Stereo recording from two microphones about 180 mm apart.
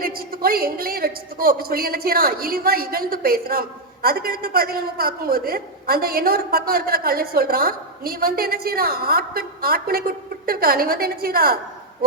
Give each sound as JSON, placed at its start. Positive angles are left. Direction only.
{"t": 0.0, "sound": "a woman's voice", "side_deg": -55}